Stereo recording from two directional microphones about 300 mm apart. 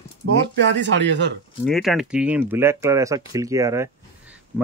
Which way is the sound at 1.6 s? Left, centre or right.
Centre.